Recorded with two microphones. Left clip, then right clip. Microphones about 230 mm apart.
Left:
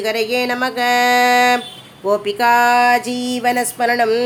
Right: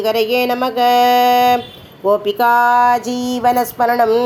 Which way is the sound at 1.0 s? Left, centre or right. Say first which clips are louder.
Right 2 dB; left.